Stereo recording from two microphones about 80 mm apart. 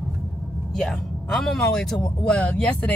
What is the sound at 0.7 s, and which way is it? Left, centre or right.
Speech, centre.